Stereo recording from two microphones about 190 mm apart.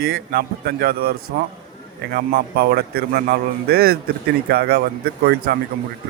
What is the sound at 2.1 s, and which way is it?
Speech, 50° right (ahead or behind).